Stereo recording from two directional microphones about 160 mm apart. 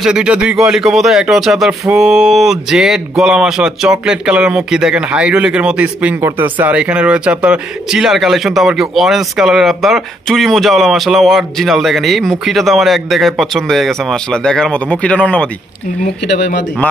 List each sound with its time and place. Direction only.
0.0 s speech: 5° right (ahead or behind)